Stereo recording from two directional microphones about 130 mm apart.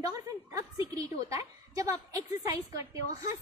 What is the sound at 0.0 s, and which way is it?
A woman's voice, 25° right (ahead or behind).